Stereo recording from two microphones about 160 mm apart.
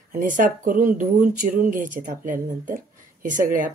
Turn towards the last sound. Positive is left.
turn(degrees=-55)  # may be behind; listen again after turning